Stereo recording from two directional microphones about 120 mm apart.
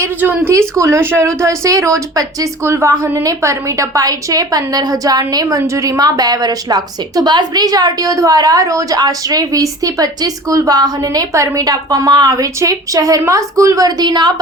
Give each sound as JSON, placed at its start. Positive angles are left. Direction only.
{"t": 0.0, "sound": "a woman's voice", "side_deg": -15}